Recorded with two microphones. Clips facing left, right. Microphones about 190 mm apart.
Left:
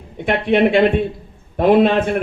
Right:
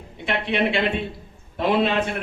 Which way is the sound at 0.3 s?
50° left (ahead or behind).